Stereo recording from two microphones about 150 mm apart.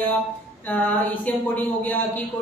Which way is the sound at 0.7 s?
10° left (ahead or behind).